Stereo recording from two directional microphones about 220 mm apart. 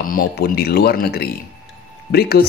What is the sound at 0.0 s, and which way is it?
Speech, 40° left (ahead or behind).